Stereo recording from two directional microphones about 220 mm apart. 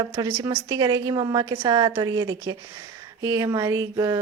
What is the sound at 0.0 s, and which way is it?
A woman's voice, 15° right (ahead or behind).